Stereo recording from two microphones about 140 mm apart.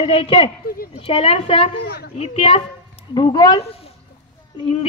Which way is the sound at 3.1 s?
30° left (ahead or behind).